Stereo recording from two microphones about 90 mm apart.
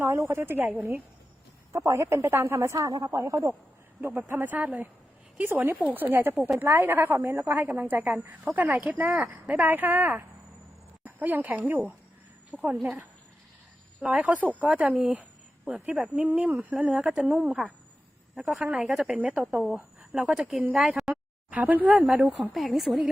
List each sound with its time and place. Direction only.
0.0 s a woman's voice: 25° right (ahead or behind)
1.7 s speech: 35° right (ahead or behind)
2.7 s speech: 40° right (ahead or behind)
4.3 s a woman's voice: 20° right (ahead or behind)
14.0 s speech: 15° right (ahead or behind)
15.1 s a sound: 15° right (ahead or behind)
16.2 s speech: 15° right (ahead or behind)
16.8 s a woman's voice: 5° right (ahead or behind)
21.5 s speech: 20° right (ahead or behind)
22.5 s a woman's voice: centre (ahead or behind)